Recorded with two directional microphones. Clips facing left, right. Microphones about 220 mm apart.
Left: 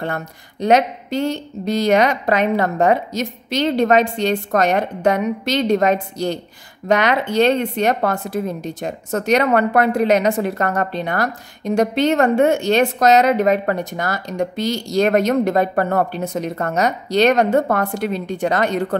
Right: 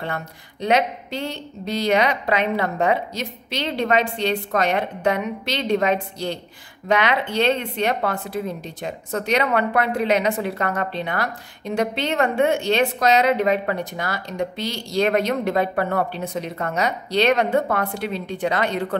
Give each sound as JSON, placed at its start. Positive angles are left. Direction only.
{"t": 0.0, "sound": "a woman's voice", "side_deg": 45}